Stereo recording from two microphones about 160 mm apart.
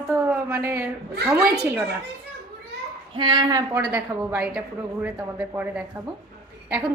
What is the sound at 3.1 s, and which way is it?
Speech, 30° right (ahead or behind).